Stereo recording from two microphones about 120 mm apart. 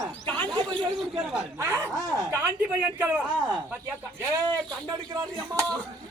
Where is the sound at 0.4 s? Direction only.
40° right (ahead or behind).